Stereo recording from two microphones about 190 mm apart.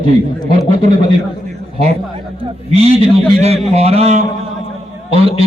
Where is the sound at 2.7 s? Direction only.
30° right (ahead or behind).